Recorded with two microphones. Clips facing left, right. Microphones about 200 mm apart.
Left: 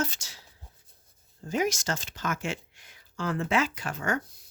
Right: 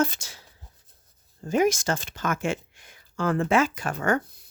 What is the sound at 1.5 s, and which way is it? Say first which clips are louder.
Speech: right 6 dB; 55° right (ahead or behind).